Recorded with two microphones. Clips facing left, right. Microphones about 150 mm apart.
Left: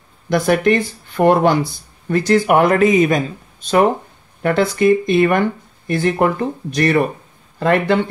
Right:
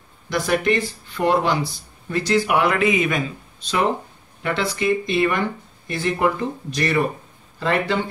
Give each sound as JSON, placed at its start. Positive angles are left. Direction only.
{"t": 0.3, "sound": "speech", "side_deg": 55}